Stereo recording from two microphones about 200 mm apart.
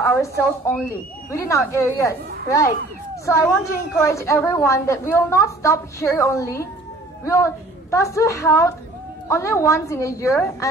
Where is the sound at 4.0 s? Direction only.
15° left (ahead or behind).